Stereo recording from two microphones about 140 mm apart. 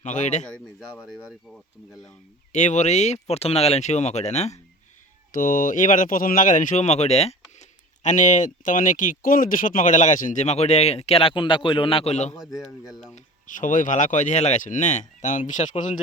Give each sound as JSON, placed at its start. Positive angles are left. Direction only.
{"t": 0.0, "sound": "speech", "side_deg": 60}
{"t": 1.0, "sound": "speech", "side_deg": 0}
{"t": 2.5, "sound": "speech", "side_deg": 60}
{"t": 5.3, "sound": "speech", "side_deg": 75}
{"t": 12.3, "sound": "a man's voice", "side_deg": 25}
{"t": 13.1, "sound": "speech", "side_deg": 70}